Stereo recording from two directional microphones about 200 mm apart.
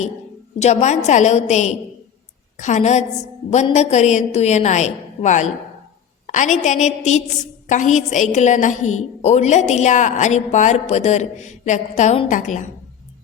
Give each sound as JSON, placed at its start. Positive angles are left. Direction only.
{"t": 0.6, "sound": "a woman's voice", "side_deg": 35}